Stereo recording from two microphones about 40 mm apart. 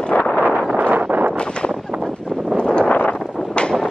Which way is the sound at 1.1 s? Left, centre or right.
Right.